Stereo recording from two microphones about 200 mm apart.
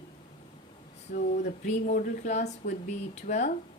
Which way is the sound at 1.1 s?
35° left (ahead or behind).